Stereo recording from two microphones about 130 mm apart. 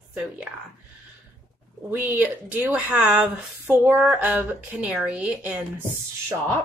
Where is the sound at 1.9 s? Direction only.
10° right (ahead or behind).